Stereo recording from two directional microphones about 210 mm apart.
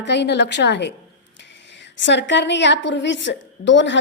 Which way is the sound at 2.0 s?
60° left (ahead or behind).